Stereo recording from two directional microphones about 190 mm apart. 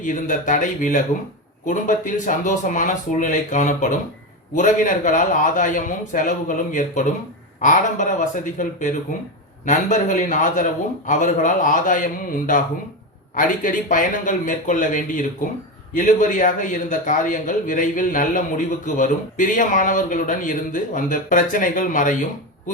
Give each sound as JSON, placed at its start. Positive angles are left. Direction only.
{"t": 0.0, "sound": "speech", "side_deg": 45}